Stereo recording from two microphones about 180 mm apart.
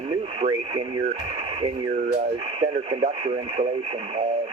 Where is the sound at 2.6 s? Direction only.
30° right (ahead or behind).